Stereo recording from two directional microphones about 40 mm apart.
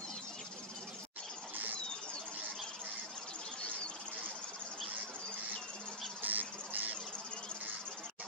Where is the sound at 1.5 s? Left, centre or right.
Right.